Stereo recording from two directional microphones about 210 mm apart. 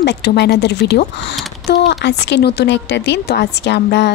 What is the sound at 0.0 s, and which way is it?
A woman's voice, 50° left (ahead or behind).